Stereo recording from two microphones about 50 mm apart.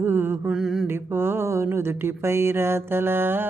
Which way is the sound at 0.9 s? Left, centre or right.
Right.